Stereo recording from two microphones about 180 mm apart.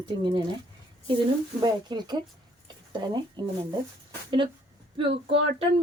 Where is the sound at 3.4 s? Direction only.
25° right (ahead or behind).